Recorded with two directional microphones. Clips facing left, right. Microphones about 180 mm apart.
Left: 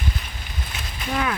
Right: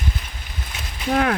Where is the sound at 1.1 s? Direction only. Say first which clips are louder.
Right 6 dB; 60° right (ahead or behind).